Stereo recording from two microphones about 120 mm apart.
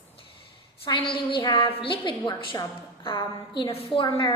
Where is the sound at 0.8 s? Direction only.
45° left (ahead or behind).